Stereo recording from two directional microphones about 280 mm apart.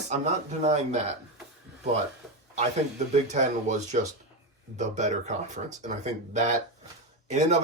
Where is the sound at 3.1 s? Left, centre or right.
Right.